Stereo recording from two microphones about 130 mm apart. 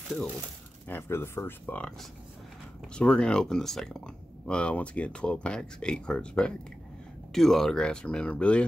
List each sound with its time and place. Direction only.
0.8 s speech: 15° left (ahead or behind)